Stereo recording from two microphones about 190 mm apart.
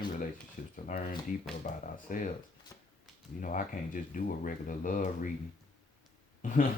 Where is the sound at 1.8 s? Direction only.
45° left (ahead or behind).